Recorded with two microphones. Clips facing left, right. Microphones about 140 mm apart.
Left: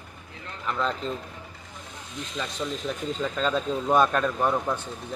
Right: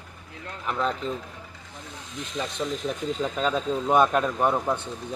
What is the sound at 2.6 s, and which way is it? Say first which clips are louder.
Speech: right 2 dB; 20° right (ahead or behind).